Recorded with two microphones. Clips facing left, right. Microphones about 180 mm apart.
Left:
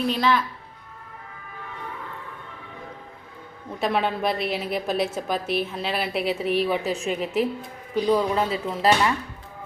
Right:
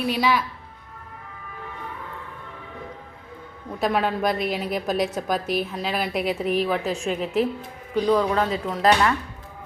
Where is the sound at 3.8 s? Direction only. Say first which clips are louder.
Right 1 dB; centre (ahead or behind).